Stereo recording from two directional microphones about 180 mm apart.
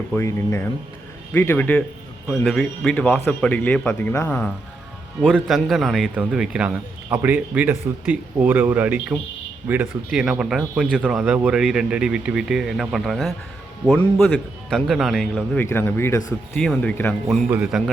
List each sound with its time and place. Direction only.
0.1 s speech: 15° left (ahead or behind)
15.6 s speech: 10° left (ahead or behind)
17.2 s speech: 5° right (ahead or behind)